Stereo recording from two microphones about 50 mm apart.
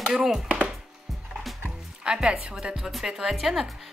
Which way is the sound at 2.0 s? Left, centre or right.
Centre.